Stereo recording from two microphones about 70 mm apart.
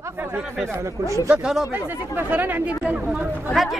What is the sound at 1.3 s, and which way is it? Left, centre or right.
Speech, centre.